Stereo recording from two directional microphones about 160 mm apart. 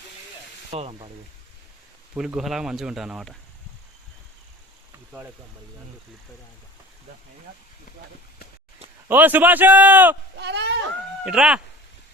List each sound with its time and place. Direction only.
0.7 s speech: 40° right (ahead or behind)
2.1 s speech: 5° right (ahead or behind)
9.0 s a man's voice: 10° right (ahead or behind)
10.3 s a sound: 90° right
11.3 s speech: 5° right (ahead or behind)